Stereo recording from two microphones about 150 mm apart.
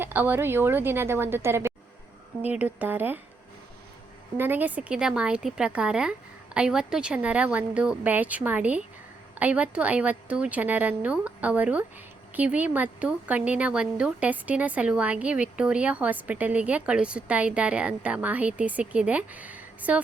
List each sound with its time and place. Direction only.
0.0 s speech: 15° right (ahead or behind)
4.4 s speech: 15° right (ahead or behind)